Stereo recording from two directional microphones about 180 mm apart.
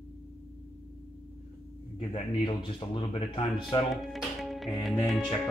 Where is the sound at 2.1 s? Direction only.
30° left (ahead or behind).